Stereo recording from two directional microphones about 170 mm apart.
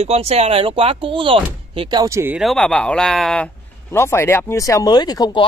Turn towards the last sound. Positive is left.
turn(degrees=25)  # may be behind; listen again after turning